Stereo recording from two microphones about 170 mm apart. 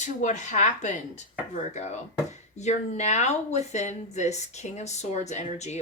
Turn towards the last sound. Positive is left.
turn(degrees=40)  # may be behind; listen again after turning